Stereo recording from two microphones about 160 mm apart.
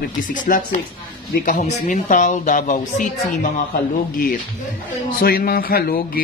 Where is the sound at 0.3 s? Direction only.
55° left (ahead or behind).